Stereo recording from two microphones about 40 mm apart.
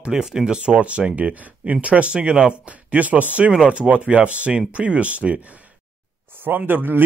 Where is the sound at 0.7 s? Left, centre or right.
Right.